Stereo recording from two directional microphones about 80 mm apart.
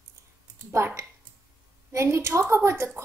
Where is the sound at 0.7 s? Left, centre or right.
Right.